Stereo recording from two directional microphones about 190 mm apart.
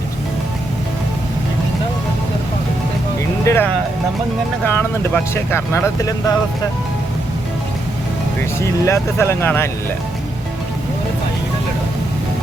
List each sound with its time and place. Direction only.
3.4 s music: 15° left (ahead or behind)
4.6 s speech: 10° left (ahead or behind)
8.8 s speech: 15° left (ahead or behind)